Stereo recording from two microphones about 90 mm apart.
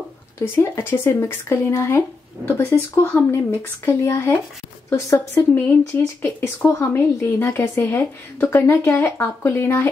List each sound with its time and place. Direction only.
0.4 s speech: 25° left (ahead or behind)